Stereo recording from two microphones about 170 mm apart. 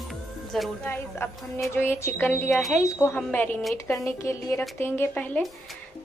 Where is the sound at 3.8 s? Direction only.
15° left (ahead or behind).